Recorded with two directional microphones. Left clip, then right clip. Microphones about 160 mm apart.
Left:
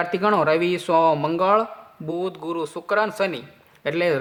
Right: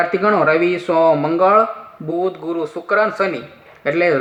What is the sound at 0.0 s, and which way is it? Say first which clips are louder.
Speech: right 5 dB; 25° left (ahead or behind).